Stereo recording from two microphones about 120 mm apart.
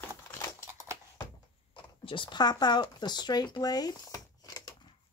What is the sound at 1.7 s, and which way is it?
Speech, 40° left (ahead or behind).